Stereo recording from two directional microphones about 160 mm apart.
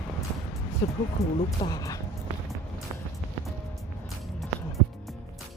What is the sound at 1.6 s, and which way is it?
Speech, 25° left (ahead or behind).